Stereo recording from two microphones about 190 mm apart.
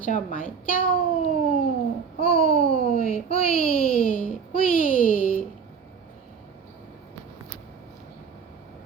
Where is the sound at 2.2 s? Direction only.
30° left (ahead or behind).